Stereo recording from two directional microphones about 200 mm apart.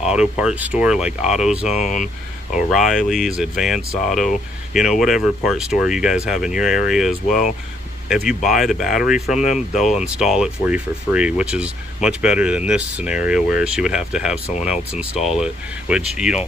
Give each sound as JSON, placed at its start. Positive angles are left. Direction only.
{"t": 0.0, "sound": "speech", "side_deg": -5}
{"t": 1.8, "sound": "speech", "side_deg": 40}
{"t": 2.5, "sound": "speech", "side_deg": 0}
{"t": 8.1, "sound": "speech", "side_deg": 0}
{"t": 9.4, "sound": "speech", "side_deg": 35}
{"t": 9.9, "sound": "speech", "side_deg": -5}